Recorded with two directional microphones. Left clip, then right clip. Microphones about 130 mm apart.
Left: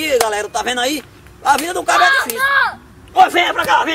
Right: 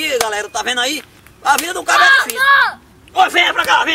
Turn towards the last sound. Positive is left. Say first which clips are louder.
# right 1 dB
turn(degrees=-10)  # may be behind; listen again after turning